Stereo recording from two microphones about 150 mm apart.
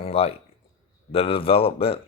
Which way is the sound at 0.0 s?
40° left (ahead or behind).